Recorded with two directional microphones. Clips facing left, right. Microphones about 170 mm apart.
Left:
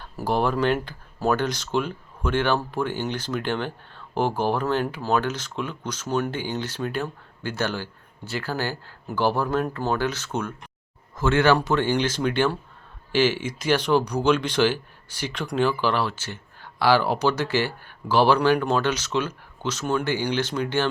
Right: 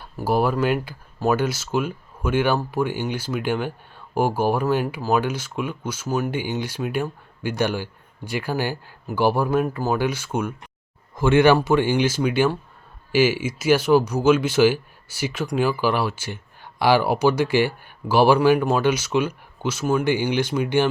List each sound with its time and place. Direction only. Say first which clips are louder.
0.2 s speech: right 2 dB; 5° right (ahead or behind)